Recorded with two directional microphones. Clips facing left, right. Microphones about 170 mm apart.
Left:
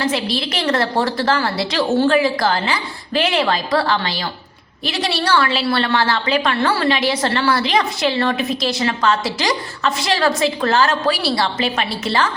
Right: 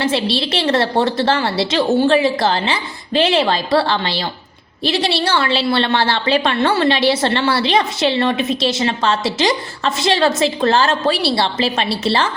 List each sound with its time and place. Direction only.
0.0 s a woman's voice: 30° right (ahead or behind)